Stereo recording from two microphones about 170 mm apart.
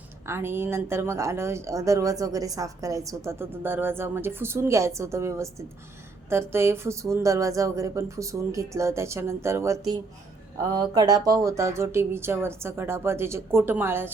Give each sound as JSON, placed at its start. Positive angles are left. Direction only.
{"t": 0.3, "sound": "speech", "side_deg": -15}